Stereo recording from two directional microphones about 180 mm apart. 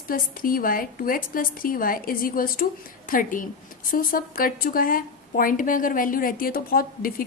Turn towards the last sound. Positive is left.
turn(degrees=55)  # may be behind; listen again after turning